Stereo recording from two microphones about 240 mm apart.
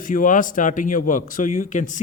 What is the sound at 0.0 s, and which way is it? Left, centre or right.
Speech, left.